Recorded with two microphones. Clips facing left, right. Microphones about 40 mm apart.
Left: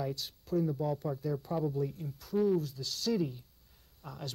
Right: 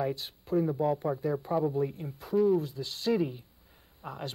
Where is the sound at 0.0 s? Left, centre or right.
Right.